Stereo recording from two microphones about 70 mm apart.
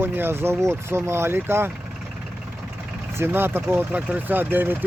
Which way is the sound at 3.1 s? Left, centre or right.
Right.